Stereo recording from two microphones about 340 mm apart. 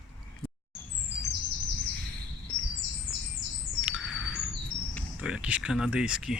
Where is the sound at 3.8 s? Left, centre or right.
Centre.